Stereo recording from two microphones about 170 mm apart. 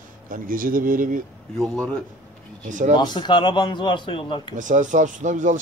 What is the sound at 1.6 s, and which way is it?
Speech, 5° left (ahead or behind).